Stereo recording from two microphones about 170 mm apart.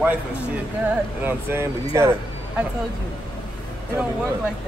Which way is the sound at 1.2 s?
15° right (ahead or behind).